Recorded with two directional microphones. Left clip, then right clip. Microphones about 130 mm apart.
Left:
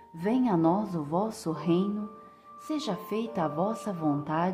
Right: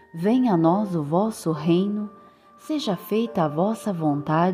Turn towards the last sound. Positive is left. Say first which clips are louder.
# right 7 dB
turn(degrees=-50)  # may be behind; listen again after turning